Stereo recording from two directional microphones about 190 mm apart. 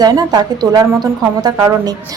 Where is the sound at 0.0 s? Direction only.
20° right (ahead or behind).